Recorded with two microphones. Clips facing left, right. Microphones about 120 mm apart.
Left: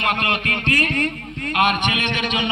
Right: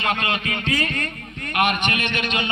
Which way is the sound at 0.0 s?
65° left (ahead or behind).